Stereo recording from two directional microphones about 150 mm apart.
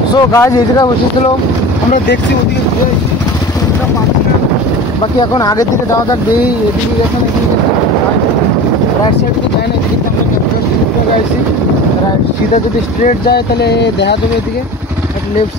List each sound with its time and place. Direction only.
0.3 s speech: 20° left (ahead or behind)
5.3 s speech: 25° left (ahead or behind)
13.0 s speech: 90° left